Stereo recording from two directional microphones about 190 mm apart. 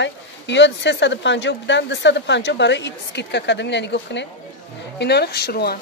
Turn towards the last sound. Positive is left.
turn(degrees=55)  # may be behind; listen again after turning